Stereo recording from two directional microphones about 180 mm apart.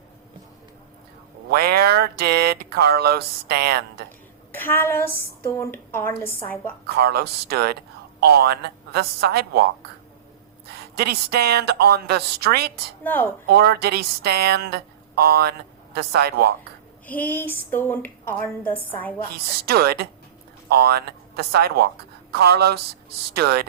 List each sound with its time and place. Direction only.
1.5 s speech: 60° right (ahead or behind)
4.5 s speech: 10° left (ahead or behind)
6.8 s speech: 60° right (ahead or behind)
10.7 s speech: 60° right (ahead or behind)
13.0 s speech: 10° left (ahead or behind)
13.5 s speech: 60° right (ahead or behind)
17.1 s speech: 10° left (ahead or behind)
19.3 s speech: 60° right (ahead or behind)